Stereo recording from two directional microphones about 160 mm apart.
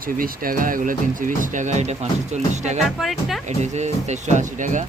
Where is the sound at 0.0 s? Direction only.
60° right (ahead or behind); by 2.8 s 45° right (ahead or behind).